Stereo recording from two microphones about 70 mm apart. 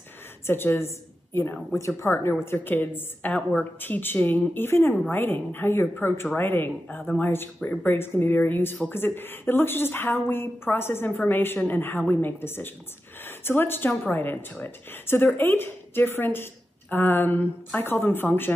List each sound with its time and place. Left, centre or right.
0.5 s a woman's voice: left
2.4 s a woman's voice: left